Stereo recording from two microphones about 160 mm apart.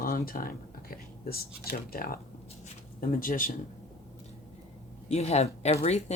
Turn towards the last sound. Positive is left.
turn(degrees=45)  # may be behind; listen again after turning